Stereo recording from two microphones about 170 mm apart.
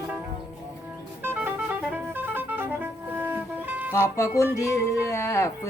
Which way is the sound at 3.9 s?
15° left (ahead or behind).